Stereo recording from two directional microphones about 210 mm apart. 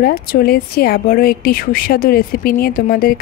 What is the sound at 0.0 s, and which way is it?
A woman's voice, 45° left (ahead or behind).